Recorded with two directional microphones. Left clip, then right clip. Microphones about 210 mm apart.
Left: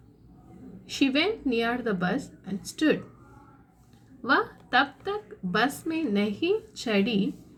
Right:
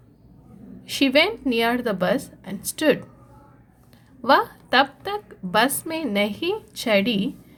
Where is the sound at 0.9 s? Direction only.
45° right (ahead or behind).